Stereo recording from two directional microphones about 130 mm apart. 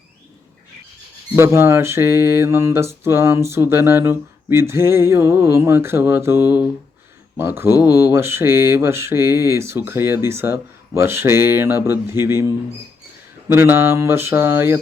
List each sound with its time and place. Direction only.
1.4 s mantra: 20° right (ahead or behind)
13.5 s mantra: 20° right (ahead or behind)